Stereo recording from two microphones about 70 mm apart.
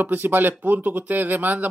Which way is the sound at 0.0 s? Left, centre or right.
Right.